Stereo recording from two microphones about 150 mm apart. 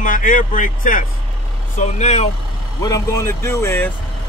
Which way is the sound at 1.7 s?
50° left (ahead or behind).